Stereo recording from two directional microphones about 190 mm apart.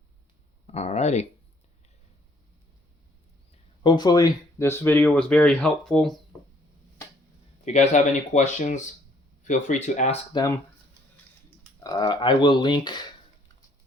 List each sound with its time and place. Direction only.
0.7 s a sound: 35° left (ahead or behind)
3.8 s speech: 20° left (ahead or behind); by 6.1 s centre (ahead or behind)
7.6 s speech: 35° left (ahead or behind)
11.8 s speech: 20° left (ahead or behind)